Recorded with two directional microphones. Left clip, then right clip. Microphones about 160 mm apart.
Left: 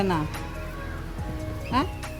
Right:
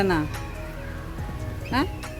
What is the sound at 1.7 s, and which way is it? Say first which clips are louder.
Speech: even; 15° right (ahead or behind).